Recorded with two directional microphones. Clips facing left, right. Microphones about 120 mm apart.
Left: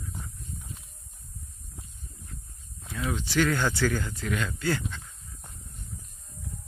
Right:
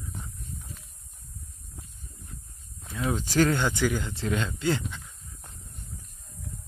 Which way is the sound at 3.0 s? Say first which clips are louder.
Right 3 dB; 40° right (ahead or behind).